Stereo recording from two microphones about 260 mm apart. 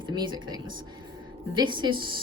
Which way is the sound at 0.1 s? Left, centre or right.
Centre.